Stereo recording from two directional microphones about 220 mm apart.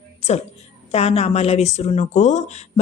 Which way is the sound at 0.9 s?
30° left (ahead or behind).